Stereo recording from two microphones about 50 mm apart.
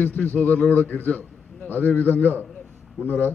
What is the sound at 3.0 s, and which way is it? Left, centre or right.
Speech, left.